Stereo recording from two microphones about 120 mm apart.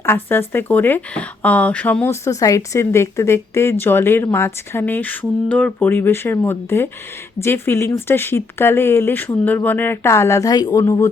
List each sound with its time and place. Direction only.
0.0 s speech: 20° left (ahead or behind)